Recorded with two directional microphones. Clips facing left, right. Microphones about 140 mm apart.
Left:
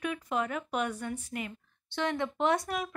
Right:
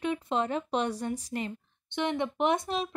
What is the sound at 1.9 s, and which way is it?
Speech, 20° right (ahead or behind).